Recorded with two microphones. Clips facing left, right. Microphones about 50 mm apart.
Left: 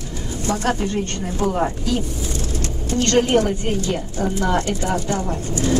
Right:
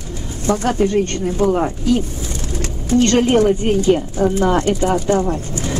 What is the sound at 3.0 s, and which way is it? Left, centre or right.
A woman's voice, right.